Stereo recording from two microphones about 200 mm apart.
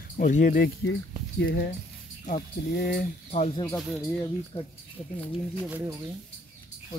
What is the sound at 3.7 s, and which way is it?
Speech, centre (ahead or behind).